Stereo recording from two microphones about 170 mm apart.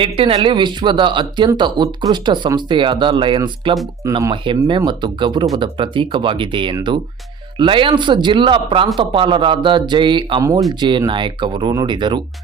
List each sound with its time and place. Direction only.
0.0 s speech: 30° right (ahead or behind)